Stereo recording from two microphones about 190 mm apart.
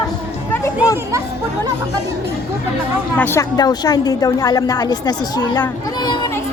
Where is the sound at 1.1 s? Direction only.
15° right (ahead or behind).